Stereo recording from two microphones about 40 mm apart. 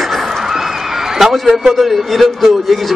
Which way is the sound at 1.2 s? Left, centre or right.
Centre.